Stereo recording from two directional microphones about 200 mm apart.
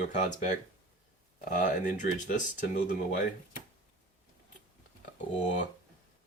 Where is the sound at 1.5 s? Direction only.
40° left (ahead or behind).